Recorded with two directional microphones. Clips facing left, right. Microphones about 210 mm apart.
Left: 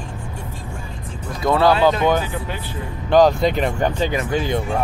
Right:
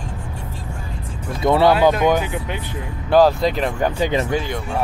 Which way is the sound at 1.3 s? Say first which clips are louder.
Right 1 dB; 20° right (ahead or behind).